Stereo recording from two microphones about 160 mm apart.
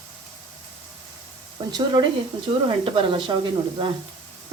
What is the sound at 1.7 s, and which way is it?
A woman's voice, 25° right (ahead or behind).